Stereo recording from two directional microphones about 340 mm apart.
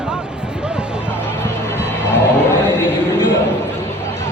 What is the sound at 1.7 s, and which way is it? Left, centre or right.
Music, centre.